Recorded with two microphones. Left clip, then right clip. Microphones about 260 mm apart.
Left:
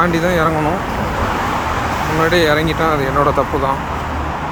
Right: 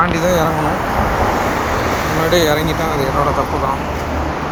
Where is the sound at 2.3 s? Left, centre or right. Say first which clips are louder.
Right 1 dB; centre.